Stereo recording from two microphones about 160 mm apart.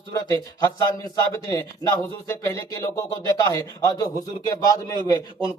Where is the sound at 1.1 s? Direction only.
20° left (ahead or behind).